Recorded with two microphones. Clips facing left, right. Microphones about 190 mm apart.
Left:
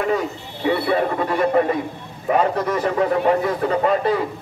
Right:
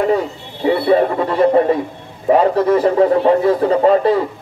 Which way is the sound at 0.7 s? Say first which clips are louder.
Right 6 dB; 30° right (ahead or behind).